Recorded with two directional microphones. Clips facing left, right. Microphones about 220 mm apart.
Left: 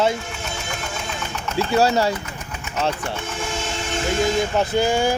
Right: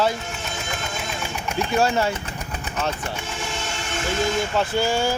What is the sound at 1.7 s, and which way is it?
Speech, 35° left (ahead or behind).